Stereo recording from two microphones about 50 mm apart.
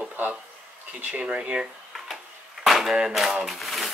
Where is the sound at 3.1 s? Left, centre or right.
Centre.